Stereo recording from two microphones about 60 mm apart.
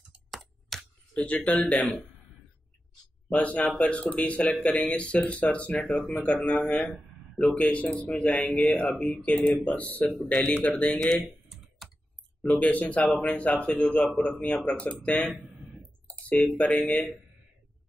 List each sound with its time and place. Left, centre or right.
0.3 s tick: centre
1.1 s speech: centre
3.3 s speech: left
8.0 s speech: left
11.4 s computer keyboard: centre
12.5 s speech: left